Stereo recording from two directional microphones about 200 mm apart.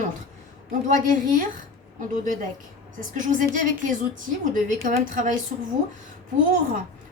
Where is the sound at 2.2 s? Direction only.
40° right (ahead or behind).